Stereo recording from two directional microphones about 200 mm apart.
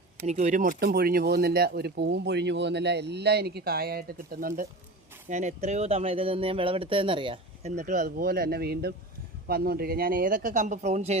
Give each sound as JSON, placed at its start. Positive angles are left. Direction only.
{"t": 0.2, "sound": "speech", "side_deg": -35}
{"t": 7.8, "sound": "speech", "side_deg": -40}